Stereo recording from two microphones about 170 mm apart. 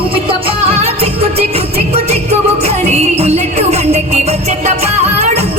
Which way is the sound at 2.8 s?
40° right (ahead or behind).